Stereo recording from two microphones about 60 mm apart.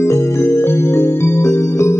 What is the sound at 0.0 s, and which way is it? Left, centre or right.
Music, left.